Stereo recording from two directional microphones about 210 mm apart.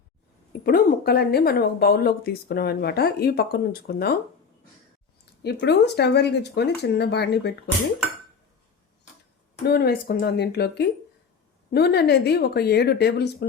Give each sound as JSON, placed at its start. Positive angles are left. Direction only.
{"t": 0.6, "sound": "speech", "side_deg": 45}
{"t": 5.4, "sound": "speech", "side_deg": 55}
{"t": 9.6, "sound": "speech", "side_deg": 50}